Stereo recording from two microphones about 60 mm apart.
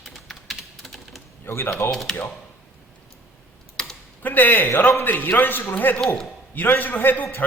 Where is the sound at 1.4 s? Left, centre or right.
Left.